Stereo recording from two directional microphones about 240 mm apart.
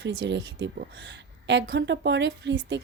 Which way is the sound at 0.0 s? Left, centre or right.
Right.